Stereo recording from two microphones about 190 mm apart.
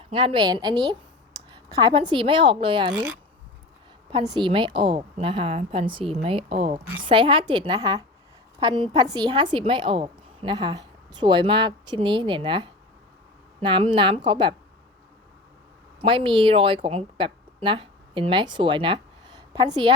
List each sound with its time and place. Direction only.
0.0 s a woman's voice: 30° right (ahead or behind)
4.1 s a woman's voice: 25° right (ahead or behind)
16.0 s a woman's voice: 25° right (ahead or behind)